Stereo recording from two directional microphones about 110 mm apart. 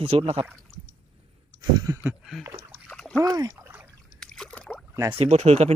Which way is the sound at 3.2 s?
35° right (ahead or behind).